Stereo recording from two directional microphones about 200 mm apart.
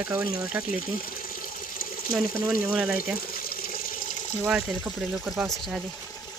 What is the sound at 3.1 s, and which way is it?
Water, 45° left (ahead or behind).